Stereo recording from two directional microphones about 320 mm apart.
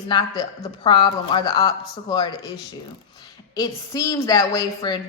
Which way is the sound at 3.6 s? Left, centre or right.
Centre.